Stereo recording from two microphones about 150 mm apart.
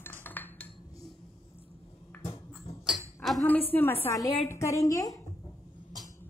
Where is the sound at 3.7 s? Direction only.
15° left (ahead or behind).